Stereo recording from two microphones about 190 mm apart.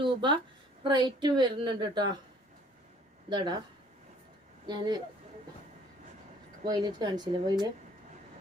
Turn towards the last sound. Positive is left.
turn(degrees=-20)  # may be behind; listen again after turning